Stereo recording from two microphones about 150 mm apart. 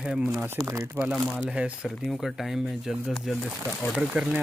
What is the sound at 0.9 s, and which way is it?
Speech, 10° right (ahead or behind).